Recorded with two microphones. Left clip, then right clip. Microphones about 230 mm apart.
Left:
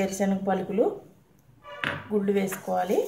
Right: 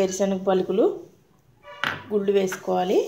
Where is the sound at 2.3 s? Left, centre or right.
Right.